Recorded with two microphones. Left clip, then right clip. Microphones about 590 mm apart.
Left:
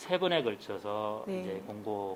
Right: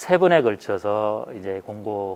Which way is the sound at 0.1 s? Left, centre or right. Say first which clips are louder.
Right 13 dB; right.